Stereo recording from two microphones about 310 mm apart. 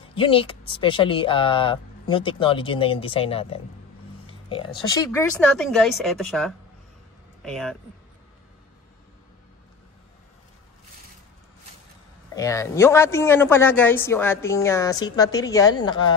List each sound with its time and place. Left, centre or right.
0.1 s a man's voice: centre
12.4 s a man's voice: centre